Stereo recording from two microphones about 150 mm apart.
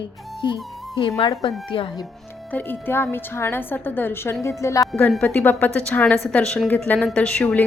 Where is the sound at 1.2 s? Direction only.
35° left (ahead or behind).